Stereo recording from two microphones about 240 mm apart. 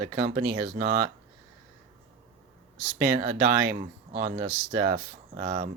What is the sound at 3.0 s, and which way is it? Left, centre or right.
Speech, right.